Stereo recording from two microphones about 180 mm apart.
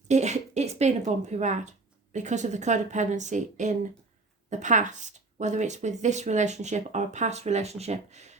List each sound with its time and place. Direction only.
0.1 s speech: 40° right (ahead or behind)